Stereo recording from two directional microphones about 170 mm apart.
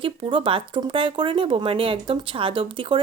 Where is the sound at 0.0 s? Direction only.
30° right (ahead or behind).